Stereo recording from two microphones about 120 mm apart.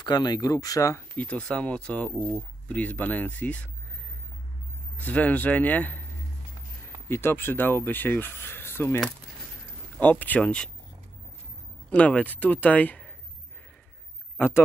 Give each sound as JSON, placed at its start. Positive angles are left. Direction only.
{"t": 0.0, "sound": "speech", "side_deg": 35}
{"t": 1.1, "sound": "speech", "side_deg": 10}
{"t": 5.0, "sound": "speech", "side_deg": 15}
{"t": 7.1, "sound": "speech", "side_deg": 20}
{"t": 11.9, "sound": "speech", "side_deg": 10}
{"t": 14.3, "sound": "a sound", "side_deg": 20}